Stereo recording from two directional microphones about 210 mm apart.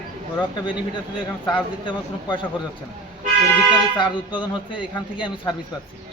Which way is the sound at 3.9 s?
25° left (ahead or behind).